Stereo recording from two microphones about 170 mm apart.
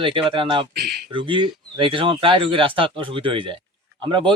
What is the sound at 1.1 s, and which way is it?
A man's voice, 30° right (ahead or behind).